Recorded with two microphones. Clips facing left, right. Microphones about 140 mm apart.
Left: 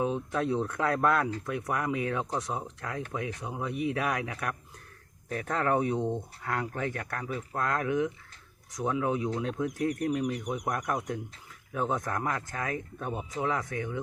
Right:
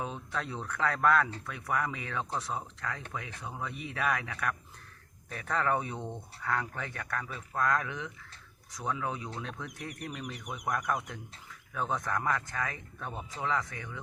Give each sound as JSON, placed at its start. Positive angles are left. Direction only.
{"t": 0.0, "sound": "speech", "side_deg": 20}